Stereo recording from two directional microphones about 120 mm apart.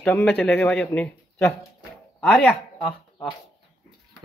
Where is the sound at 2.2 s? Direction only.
5° left (ahead or behind).